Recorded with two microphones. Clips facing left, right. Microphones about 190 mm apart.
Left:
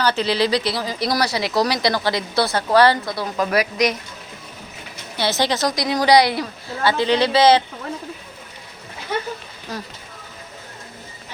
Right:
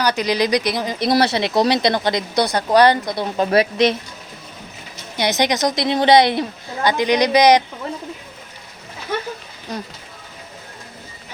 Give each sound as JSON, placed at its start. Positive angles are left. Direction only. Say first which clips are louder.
{"t": 0.0, "sound": "speech", "louder": "right 1 dB", "side_deg": -15}
{"t": 5.1, "sound": "speech", "louder": "right 2 dB", "side_deg": -20}
{"t": 9.7, "sound": "speech", "louder": "right 2 dB", "side_deg": -20}